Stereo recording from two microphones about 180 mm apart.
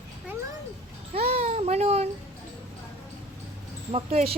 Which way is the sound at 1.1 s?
35° right (ahead or behind).